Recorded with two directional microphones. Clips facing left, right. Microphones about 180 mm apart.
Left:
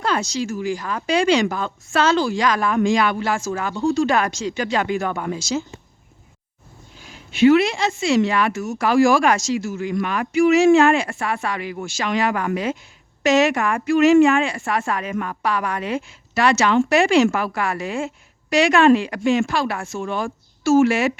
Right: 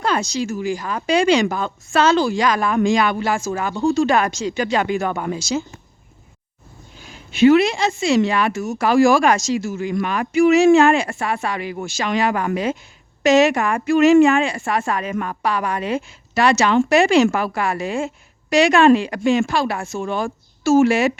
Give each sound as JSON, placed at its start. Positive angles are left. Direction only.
{"t": 0.0, "sound": "speech", "side_deg": -15}
{"t": 7.3, "sound": "a woman's voice", "side_deg": -40}
{"t": 13.8, "sound": "a woman's voice", "side_deg": -45}